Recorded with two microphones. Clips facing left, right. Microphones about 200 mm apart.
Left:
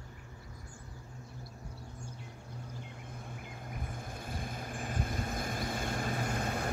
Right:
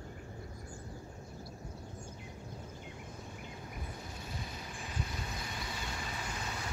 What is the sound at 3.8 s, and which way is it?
Vehicle, 50° left (ahead or behind).